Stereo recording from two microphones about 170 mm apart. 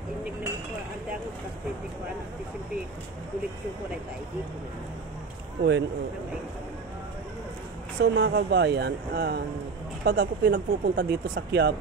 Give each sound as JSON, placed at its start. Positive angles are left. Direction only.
{"t": 5.6, "sound": "speech", "side_deg": -90}
{"t": 8.0, "sound": "speech", "side_deg": -90}